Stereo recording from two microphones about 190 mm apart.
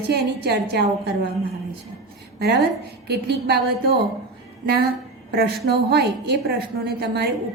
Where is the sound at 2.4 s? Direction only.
55° right (ahead or behind).